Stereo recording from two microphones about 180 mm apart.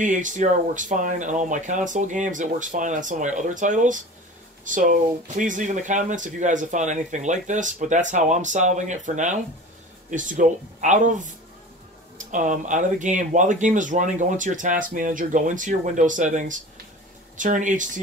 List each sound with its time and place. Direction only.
0.0 s speech: 45° right (ahead or behind)